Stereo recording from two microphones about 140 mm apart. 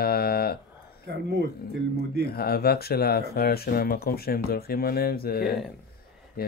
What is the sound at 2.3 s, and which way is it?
Speech, 90° left.